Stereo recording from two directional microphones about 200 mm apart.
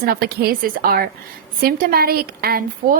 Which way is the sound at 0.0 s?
50° right (ahead or behind).